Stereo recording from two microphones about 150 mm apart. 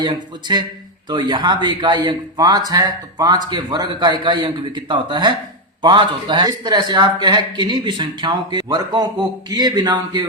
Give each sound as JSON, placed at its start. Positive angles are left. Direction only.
{"t": 0.0, "sound": "a man's voice", "side_deg": -30}